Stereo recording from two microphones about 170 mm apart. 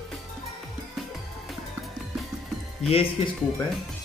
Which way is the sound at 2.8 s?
35° left (ahead or behind).